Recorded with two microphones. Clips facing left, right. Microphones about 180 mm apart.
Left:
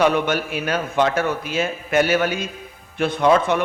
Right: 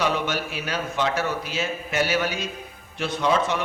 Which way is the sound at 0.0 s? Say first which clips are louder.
Left 6 dB; 55° left (ahead or behind).